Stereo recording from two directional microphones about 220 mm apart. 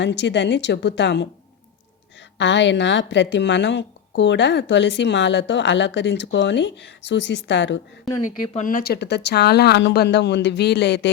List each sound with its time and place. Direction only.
0.0 s a woman's voice: 55° left (ahead or behind)
2.4 s a woman's voice: 55° left (ahead or behind)
8.1 s speech: centre (ahead or behind)
8.5 s a woman's voice: 40° left (ahead or behind)